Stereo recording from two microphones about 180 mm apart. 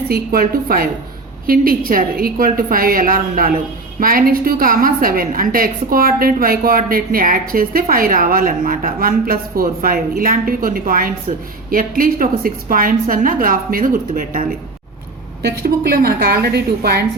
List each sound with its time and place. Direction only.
0.1 s a woman's voice: 55° right (ahead or behind)
15.4 s a woman's voice: 65° right (ahead or behind)